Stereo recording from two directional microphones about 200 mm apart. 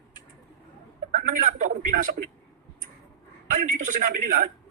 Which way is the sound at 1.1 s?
40° right (ahead or behind).